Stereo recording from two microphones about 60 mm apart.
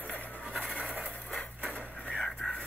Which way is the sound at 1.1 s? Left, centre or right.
Left.